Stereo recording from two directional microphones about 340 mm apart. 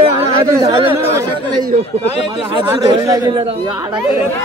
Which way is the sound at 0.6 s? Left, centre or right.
Centre.